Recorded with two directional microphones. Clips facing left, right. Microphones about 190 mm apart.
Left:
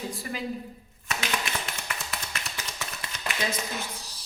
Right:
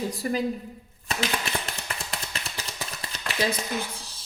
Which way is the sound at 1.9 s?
30° right (ahead or behind).